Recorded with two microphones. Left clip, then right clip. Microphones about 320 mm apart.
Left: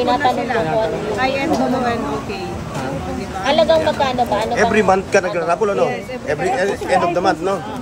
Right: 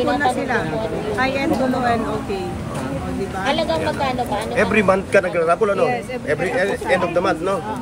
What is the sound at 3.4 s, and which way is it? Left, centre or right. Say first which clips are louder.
Speech: left 7 dB; left.